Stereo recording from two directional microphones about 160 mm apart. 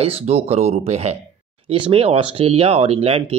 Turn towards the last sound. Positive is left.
turn(degrees=-40)  # may be behind; listen again after turning